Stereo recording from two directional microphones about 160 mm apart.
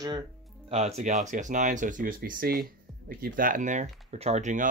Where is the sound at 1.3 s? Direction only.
50° right (ahead or behind).